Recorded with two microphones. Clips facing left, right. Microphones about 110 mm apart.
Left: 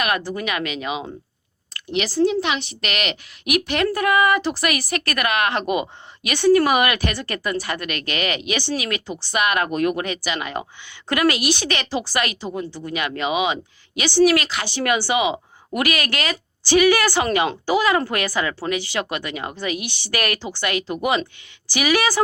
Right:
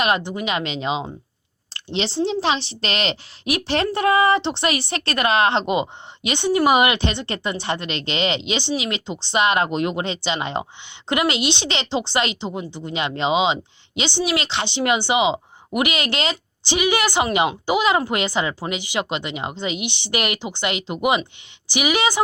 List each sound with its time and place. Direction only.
0.0 s a woman's voice: 25° right (ahead or behind)